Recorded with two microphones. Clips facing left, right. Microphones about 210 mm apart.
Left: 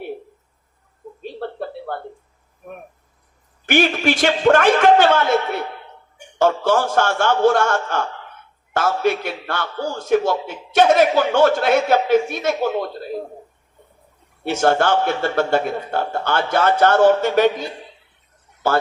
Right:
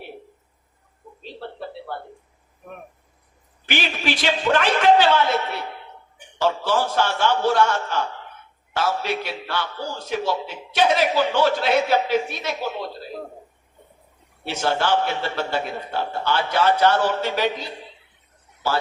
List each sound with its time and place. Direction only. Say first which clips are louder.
1.2 s a sound: left 6 dB; 50° left (ahead or behind)
3.7 s a man's voice: left 8 dB; 50° left (ahead or behind)
14.4 s a man's voice: left 6 dB; 50° left (ahead or behind)